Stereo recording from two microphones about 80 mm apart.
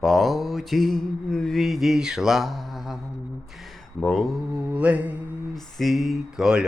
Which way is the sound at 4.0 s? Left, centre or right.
Centre.